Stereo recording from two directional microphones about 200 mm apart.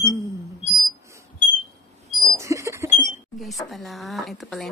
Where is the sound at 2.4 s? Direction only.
15° right (ahead or behind).